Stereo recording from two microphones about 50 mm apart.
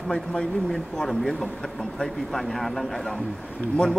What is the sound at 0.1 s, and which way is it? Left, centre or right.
Speech, centre.